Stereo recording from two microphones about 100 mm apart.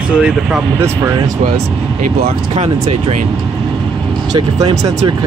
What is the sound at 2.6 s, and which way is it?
Speech, 90° right.